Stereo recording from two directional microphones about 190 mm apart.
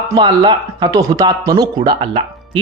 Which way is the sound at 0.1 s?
20° right (ahead or behind).